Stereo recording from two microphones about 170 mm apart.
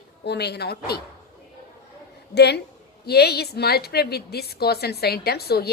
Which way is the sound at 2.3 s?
75° left (ahead or behind).